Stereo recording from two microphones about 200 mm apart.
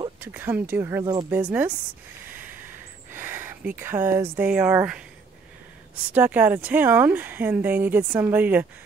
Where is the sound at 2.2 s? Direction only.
10° right (ahead or behind).